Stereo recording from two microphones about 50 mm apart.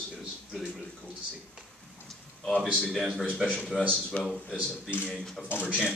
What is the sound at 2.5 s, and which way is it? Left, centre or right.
Speech, right.